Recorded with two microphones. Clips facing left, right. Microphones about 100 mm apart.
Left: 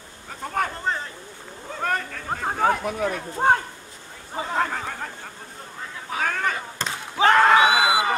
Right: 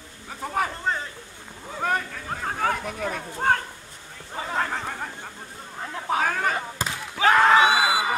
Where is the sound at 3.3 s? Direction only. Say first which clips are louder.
Left 3 dB; 20° left (ahead or behind).